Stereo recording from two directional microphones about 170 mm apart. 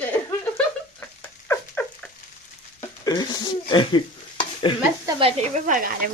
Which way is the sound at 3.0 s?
25° left (ahead or behind).